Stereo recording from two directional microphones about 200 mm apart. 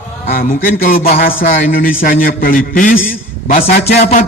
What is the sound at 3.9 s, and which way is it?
Speech, 35° left (ahead or behind).